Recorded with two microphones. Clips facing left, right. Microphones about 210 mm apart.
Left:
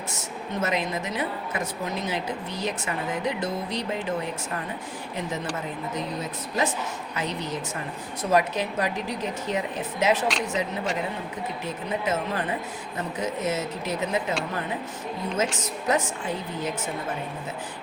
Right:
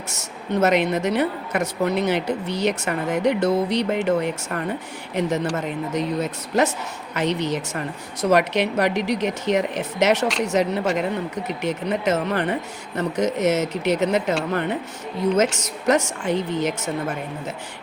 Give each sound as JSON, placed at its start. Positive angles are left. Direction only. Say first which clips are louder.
{"t": 0.1, "sound": "a woman's voice", "louder": "right 10 dB", "side_deg": -75}